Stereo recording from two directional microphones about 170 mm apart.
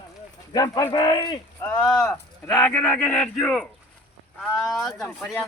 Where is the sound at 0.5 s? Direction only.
20° left (ahead or behind).